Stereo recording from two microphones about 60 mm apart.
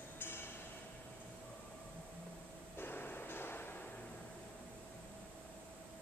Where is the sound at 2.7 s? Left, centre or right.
Left.